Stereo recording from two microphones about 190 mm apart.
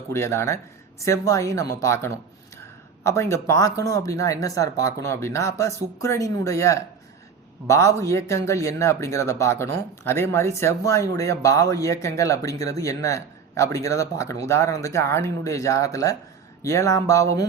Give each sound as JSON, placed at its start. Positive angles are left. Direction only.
{"t": 0.1, "sound": "speech", "side_deg": 15}